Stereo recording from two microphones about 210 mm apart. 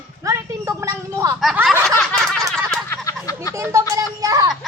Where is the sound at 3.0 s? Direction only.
15° left (ahead or behind).